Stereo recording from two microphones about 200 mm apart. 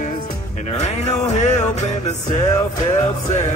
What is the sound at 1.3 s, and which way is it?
Music, 35° left (ahead or behind).